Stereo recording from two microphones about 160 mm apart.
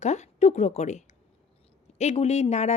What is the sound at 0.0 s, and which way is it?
A woman's voice, 45° left (ahead or behind).